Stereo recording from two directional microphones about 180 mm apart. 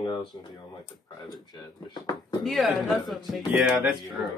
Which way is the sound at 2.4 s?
Centre (ahead or behind).